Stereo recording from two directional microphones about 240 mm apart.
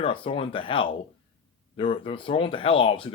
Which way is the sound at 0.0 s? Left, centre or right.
Left.